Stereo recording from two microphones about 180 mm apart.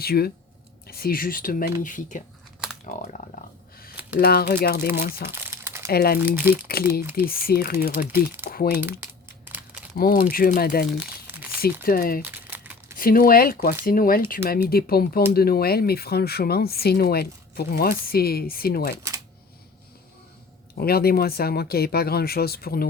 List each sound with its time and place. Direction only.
0.0 s speech: 60° left (ahead or behind)
4.2 s speech: 60° left (ahead or behind)
5.3 s crumpling: 15° right (ahead or behind)
5.9 s speech: 60° left (ahead or behind)
6.1 s speech: 10° right (ahead or behind)
7.2 s speech: 55° left (ahead or behind)
8.8 s speech: 10° right (ahead or behind)
10.0 s speech: 55° left (ahead or behind)
12.2 s crumpling: 10° right (ahead or behind)
13.0 s speech: 50° left (ahead or behind)
20.7 s speech: 60° left (ahead or behind)